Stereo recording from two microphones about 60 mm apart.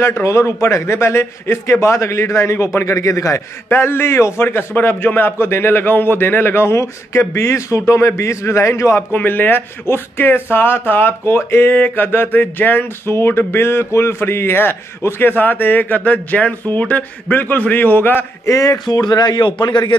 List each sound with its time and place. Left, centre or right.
0.0 s a man's voice: left
3.6 s a man's voice: left
4.4 s a man's voice: left
9.1 s a man's voice: left
18.4 s a man's voice: left